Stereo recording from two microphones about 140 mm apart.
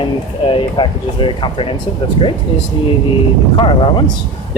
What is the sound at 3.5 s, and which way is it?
Speech, 35° left (ahead or behind).